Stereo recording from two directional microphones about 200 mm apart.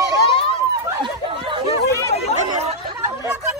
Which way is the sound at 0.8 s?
25° right (ahead or behind).